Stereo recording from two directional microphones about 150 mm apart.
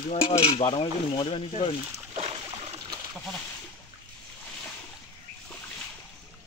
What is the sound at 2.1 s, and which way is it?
Boat, 45° right (ahead or behind).